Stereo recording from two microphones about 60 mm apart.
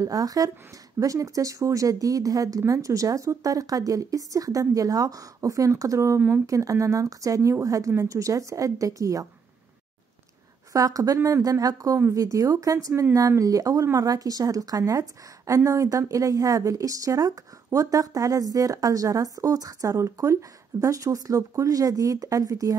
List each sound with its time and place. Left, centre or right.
0.0 s speech: right
0.9 s speech: right
10.7 s speech: right
12.1 s speech: right
13.9 s speech: right
20.0 s speech: right